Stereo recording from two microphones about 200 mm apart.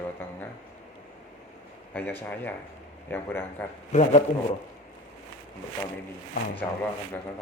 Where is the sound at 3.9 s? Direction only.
35° left (ahead or behind).